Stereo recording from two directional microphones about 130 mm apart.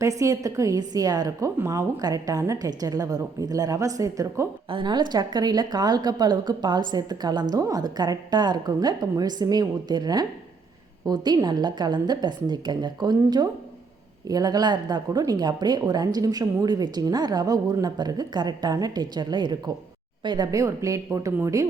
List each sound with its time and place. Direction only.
0.0 s a woman's voice: 25° right (ahead or behind)
4.7 s a woman's voice: 35° right (ahead or behind)